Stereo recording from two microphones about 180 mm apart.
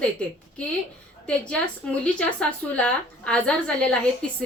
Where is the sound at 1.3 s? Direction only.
5° left (ahead or behind).